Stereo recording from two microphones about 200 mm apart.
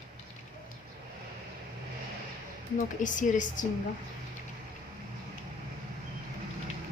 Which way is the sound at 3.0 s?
40° left (ahead or behind).